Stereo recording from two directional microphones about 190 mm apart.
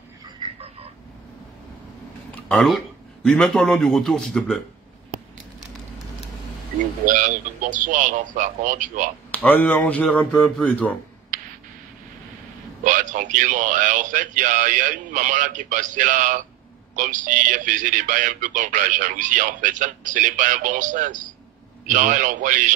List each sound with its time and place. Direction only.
0.4 s a sound: 30° right (ahead or behind)
2.4 s a man's voice: centre (ahead or behind)
7.1 s speech: 45° right (ahead or behind)
9.3 s a man's voice: 10° left (ahead or behind)
12.8 s speech: 40° right (ahead or behind)